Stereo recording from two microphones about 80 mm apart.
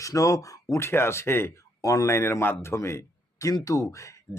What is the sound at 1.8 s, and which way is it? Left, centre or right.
Speech, left.